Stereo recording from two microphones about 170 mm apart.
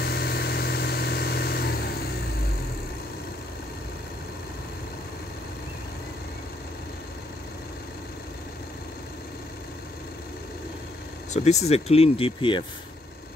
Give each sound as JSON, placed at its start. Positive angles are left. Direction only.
{"t": 0.0, "sound": "vehicle", "side_deg": 70}
{"t": 11.3, "sound": "speech", "side_deg": 40}